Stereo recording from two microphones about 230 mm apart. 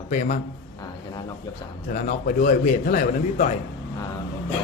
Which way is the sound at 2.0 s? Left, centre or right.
Left.